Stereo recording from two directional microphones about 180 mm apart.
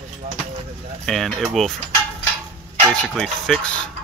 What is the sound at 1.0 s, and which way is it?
Speech, centre (ahead or behind).